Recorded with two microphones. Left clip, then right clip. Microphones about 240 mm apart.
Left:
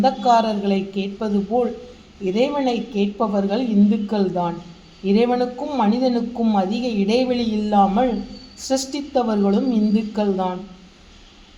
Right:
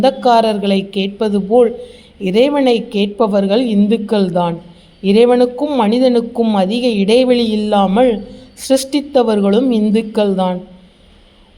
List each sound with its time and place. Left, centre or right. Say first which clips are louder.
0.0 s speech: right 5 dB; right